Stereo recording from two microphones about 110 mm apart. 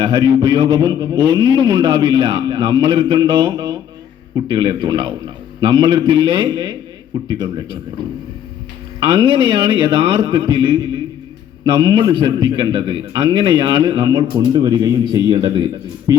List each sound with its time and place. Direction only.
0.0 s a man's voice: 40° right (ahead or behind)
9.0 s a man's voice: 45° right (ahead or behind)